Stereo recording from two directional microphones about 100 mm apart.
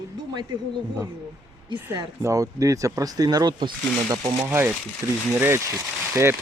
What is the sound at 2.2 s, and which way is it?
Speech, 35° right (ahead or behind).